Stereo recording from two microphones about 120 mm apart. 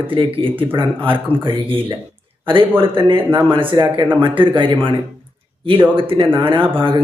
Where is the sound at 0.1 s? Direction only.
45° right (ahead or behind).